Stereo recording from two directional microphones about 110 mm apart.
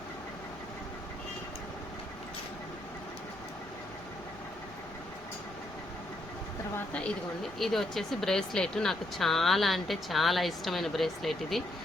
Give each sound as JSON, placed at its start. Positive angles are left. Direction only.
{"t": 7.6, "sound": "speech", "side_deg": 0}